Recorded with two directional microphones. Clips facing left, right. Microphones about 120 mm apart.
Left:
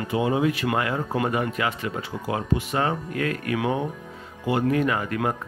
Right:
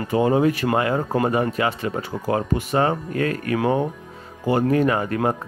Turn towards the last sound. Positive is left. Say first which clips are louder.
# right 4 dB
turn(degrees=-35)  # may be behind; listen again after turning